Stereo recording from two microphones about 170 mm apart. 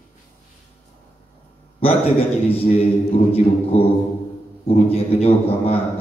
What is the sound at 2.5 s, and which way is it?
A man's voice, 35° left (ahead or behind).